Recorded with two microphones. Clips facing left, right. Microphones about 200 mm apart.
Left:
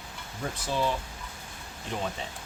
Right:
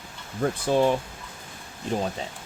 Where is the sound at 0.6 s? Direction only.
55° right (ahead or behind).